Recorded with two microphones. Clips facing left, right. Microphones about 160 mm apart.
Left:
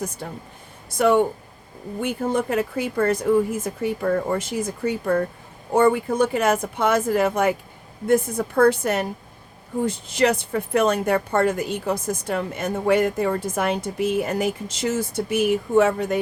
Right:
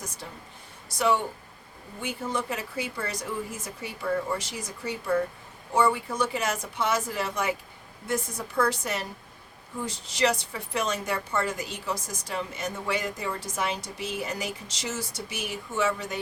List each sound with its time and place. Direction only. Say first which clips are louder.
0.2 s speech: left 8 dB; 50° left (ahead or behind)